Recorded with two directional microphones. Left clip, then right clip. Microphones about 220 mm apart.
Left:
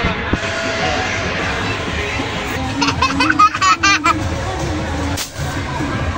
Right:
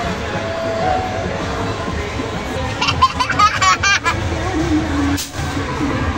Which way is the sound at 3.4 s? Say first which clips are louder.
Even; 30° left (ahead or behind).